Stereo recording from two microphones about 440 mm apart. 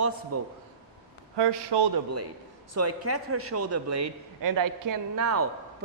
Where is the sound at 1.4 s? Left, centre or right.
Right.